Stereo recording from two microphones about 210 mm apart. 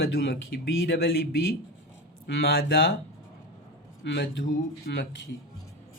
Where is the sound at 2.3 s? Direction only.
50° left (ahead or behind).